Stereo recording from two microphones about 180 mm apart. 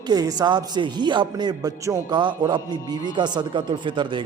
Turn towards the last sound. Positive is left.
turn(degrees=-25)  # may be behind; listen again after turning